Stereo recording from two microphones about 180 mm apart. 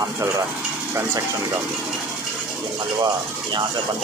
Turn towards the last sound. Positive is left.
turn(degrees=-25)  # may be behind; listen again after turning